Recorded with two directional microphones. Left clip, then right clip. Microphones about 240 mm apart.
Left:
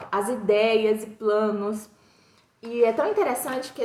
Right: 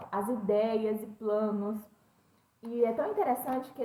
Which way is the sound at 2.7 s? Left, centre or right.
Centre.